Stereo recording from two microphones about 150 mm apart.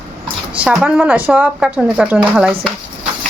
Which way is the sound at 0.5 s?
5° right (ahead or behind).